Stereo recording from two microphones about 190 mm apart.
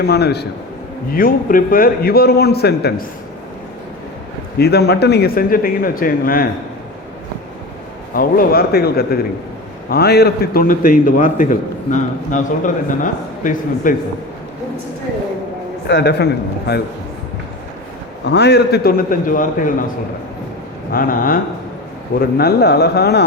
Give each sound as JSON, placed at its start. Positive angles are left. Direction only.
{"t": 0.0, "sound": "speech", "side_deg": 55}
{"t": 1.1, "sound": "a man's voice", "side_deg": 50}
{"t": 4.5, "sound": "a man's voice", "side_deg": 55}
{"t": 8.1, "sound": "a man's voice", "side_deg": 50}
{"t": 15.9, "sound": "speech", "side_deg": 65}
{"t": 18.3, "sound": "a man's voice", "side_deg": 60}
{"t": 20.9, "sound": "a man's voice", "side_deg": 50}